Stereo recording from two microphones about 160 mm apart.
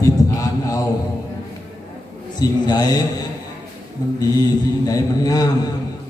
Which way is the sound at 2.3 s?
25° left (ahead or behind).